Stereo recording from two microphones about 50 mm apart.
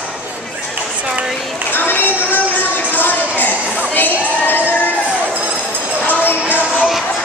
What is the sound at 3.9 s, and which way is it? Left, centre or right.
Crowd, left.